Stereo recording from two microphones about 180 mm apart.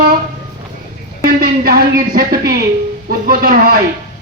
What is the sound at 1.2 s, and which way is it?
Speech, 60° right (ahead or behind).